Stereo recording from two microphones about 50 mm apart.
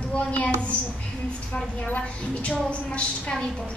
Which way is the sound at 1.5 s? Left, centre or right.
Left.